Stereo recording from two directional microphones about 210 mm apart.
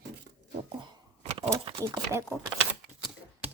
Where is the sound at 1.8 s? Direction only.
15° right (ahead or behind).